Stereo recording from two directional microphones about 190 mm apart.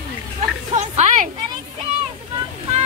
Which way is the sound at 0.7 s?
40° right (ahead or behind).